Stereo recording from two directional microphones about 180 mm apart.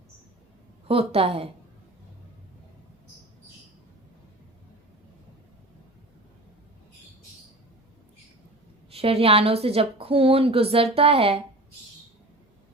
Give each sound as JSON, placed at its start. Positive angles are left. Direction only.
{"t": 0.9, "sound": "a woman's voice", "side_deg": -30}
{"t": 8.9, "sound": "a woman's voice", "side_deg": -35}